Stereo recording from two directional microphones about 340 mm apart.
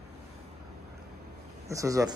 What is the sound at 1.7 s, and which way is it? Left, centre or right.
Speech, centre.